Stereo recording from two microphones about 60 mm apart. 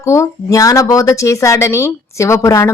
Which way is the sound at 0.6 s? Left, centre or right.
Left.